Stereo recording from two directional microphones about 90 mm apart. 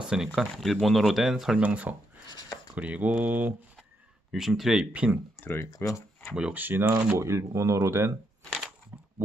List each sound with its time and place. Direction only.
0.0 s speech: 10° right (ahead or behind)
1.6 s mantra: 15° right (ahead or behind)
4.3 s speech: 5° right (ahead or behind)
5.4 s speech: 25° left (ahead or behind)
6.3 s speech: 15° right (ahead or behind)
8.5 s a sound: 5° left (ahead or behind)